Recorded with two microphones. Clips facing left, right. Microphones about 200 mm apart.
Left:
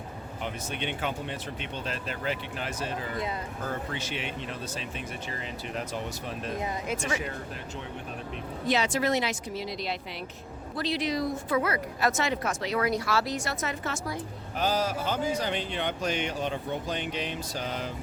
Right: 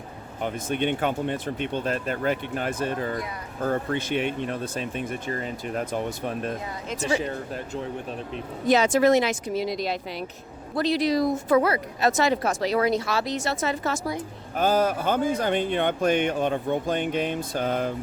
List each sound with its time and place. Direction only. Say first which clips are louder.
0.4 s speech: right 9 dB; 50° right (ahead or behind)
8.6 s a woman's voice: right 8 dB; 45° right (ahead or behind)
14.5 s speech: right 6 dB; 50° right (ahead or behind)